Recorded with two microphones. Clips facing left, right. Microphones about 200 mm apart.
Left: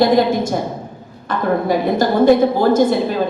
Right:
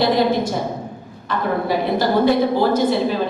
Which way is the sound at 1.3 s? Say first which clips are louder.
Left 2 dB; 45° left (ahead or behind).